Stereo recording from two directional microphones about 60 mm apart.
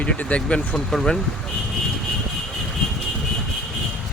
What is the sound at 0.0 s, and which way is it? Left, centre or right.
Speech, left.